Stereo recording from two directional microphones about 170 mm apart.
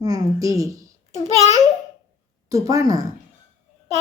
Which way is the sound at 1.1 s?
40° left (ahead or behind).